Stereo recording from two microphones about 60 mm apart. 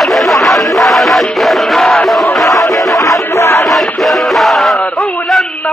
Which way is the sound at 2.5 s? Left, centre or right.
Left.